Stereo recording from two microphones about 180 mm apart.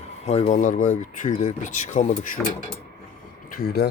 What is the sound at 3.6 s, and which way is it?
Speech, 60° left (ahead or behind).